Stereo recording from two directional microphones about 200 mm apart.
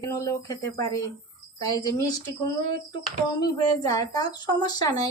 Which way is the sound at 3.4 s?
20° left (ahead or behind).